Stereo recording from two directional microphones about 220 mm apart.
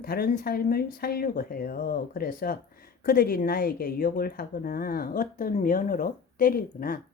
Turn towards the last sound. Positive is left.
turn(degrees=40)  # may be behind; listen again after turning